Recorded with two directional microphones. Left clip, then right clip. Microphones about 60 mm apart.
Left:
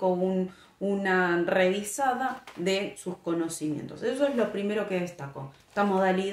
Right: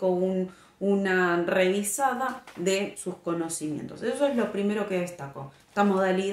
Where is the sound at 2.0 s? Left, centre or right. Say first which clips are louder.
Left 1 dB; centre.